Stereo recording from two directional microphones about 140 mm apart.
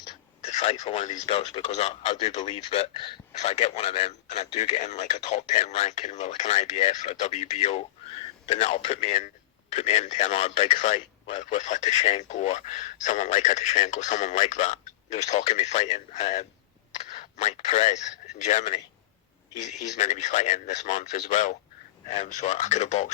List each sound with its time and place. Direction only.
0.4 s a man's voice: 50° left (ahead or behind)
20.0 s a man's voice: 55° left (ahead or behind)